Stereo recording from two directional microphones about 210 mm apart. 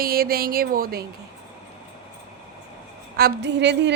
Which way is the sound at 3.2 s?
50° right (ahead or behind).